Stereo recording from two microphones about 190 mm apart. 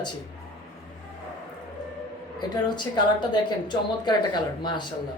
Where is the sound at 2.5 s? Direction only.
25° left (ahead or behind).